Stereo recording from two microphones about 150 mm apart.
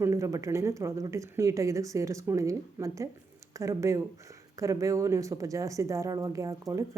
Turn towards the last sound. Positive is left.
turn(degrees=-20)  # may be behind; listen again after turning